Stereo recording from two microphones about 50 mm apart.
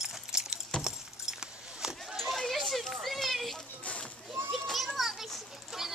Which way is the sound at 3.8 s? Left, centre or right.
Left.